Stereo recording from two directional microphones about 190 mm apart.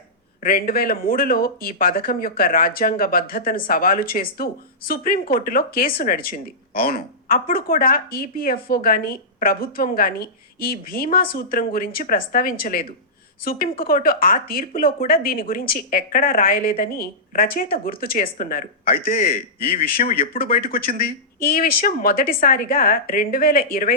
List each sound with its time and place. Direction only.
0.4 s a woman's voice: 50° left (ahead or behind)